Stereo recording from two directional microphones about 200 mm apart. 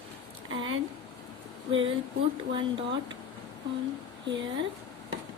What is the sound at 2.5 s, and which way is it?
Speech, 25° right (ahead or behind).